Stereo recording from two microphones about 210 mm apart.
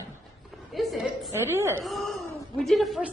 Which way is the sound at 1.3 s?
10° right (ahead or behind).